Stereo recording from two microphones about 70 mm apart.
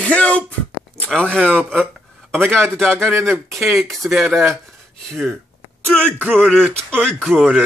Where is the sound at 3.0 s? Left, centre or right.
Right.